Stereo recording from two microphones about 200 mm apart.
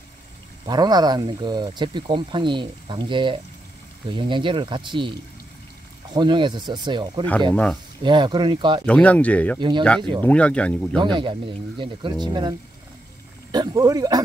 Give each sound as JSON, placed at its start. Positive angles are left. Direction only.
{"t": 0.7, "sound": "speech", "side_deg": -20}
{"t": 6.1, "sound": "speech", "side_deg": -25}
{"t": 7.5, "sound": "speech", "side_deg": 5}
{"t": 8.0, "sound": "speech", "side_deg": -25}
{"t": 8.8, "sound": "speech", "side_deg": 5}
{"t": 9.6, "sound": "speech", "side_deg": -25}
{"t": 10.2, "sound": "speech", "side_deg": 5}
{"t": 11.0, "sound": "speech", "side_deg": -25}